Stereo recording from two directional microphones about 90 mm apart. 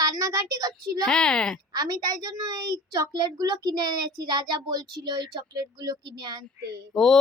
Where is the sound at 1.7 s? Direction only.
45° right (ahead or behind).